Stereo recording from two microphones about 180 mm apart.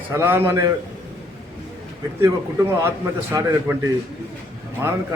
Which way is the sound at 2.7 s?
15° right (ahead or behind).